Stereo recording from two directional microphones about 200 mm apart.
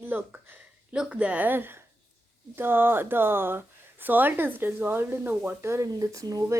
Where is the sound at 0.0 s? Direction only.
10° right (ahead or behind).